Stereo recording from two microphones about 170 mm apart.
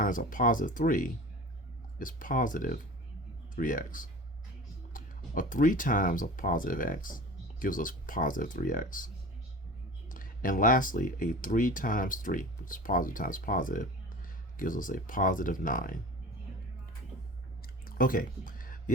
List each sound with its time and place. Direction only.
0.0 s speech: 55° left (ahead or behind)
10.1 s speech: 55° left (ahead or behind)
17.6 s a sound: 60° left (ahead or behind)